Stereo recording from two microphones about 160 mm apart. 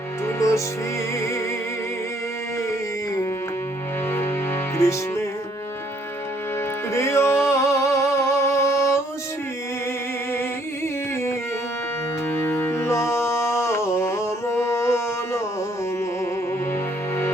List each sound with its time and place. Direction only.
0.3 s music: 20° left (ahead or behind)
4.8 s music: 20° left (ahead or behind)
6.9 s music: 15° left (ahead or behind)
12.3 s music: 15° left (ahead or behind)